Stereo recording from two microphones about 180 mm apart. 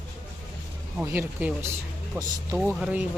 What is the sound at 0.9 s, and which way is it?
Speech, 10° right (ahead or behind).